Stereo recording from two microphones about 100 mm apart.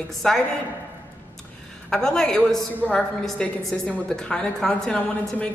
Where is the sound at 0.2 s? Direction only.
5° left (ahead or behind).